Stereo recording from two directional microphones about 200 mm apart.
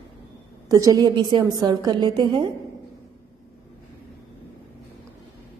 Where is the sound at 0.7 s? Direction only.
20° right (ahead or behind).